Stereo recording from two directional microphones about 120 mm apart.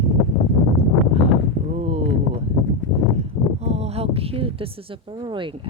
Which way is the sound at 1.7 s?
65° right (ahead or behind).